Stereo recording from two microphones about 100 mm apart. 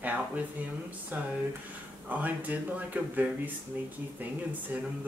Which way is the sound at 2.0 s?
15° right (ahead or behind).